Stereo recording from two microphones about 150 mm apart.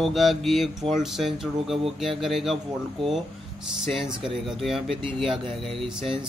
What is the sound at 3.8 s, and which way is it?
Speech, centre (ahead or behind).